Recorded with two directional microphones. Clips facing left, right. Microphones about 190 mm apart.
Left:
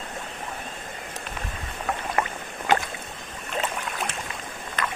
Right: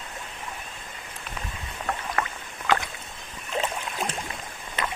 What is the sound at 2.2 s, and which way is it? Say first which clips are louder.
Rowboat: left 4 dB; 20° left (ahead or behind).